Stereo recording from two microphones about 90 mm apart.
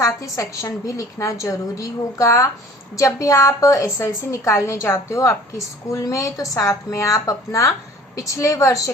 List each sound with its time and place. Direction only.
0.0 s a woman's voice: 35° left (ahead or behind)